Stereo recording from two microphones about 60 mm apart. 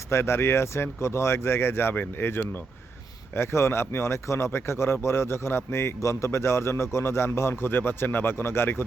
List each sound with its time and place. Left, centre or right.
0.1 s speech: left